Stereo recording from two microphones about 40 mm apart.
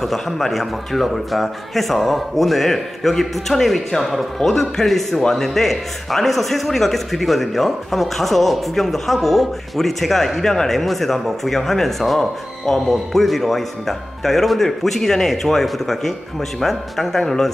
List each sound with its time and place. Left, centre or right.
0.0 s a man's voice: centre